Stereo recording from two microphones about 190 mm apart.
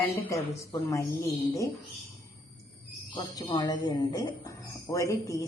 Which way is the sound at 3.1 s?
25° left (ahead or behind).